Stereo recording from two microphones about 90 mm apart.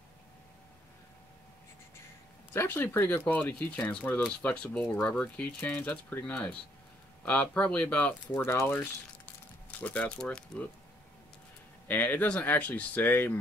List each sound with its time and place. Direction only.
2.5 s speech: 25° left (ahead or behind)
8.4 s speech: 30° left (ahead or behind); by 10.7 s 10° left (ahead or behind)
11.9 s speech: 20° left (ahead or behind)